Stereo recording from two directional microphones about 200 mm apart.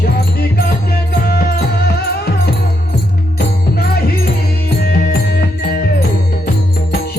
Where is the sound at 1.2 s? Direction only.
50° left (ahead or behind).